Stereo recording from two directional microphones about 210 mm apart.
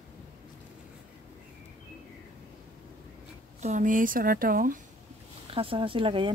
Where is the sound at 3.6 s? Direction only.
35° right (ahead or behind).